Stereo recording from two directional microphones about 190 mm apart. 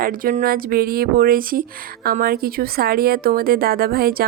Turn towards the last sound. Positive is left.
turn(degrees=-50)  # may be behind; listen again after turning